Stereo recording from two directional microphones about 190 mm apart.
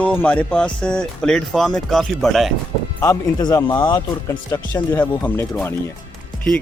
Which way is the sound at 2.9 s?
20° left (ahead or behind).